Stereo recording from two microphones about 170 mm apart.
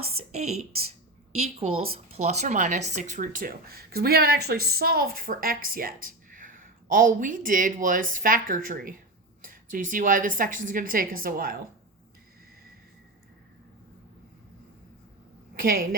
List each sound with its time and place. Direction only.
0.0 s a woman's voice: 35° right (ahead or behind); by 11.5 s 60° right (ahead or behind)
15.5 s a woman's voice: 60° right (ahead or behind)